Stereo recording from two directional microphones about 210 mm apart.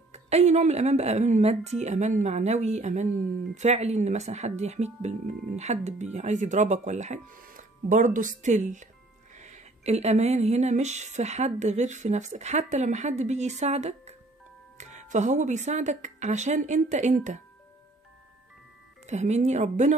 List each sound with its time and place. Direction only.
0.1 s speech: 30° right (ahead or behind)
19.0 s speech: 35° right (ahead or behind)